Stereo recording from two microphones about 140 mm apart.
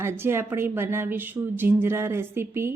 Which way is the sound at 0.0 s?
15° right (ahead or behind).